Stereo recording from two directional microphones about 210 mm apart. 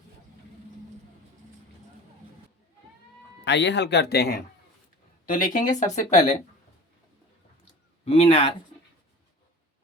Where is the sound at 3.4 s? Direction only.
55° left (ahead or behind); by 6.3 s 35° left (ahead or behind).